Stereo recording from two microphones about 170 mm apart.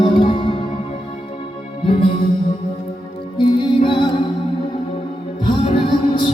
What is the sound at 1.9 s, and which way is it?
Music, 30° left (ahead or behind).